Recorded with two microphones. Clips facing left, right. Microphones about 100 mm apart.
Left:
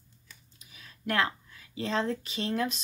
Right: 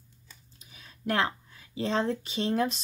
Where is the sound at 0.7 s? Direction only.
30° right (ahead or behind).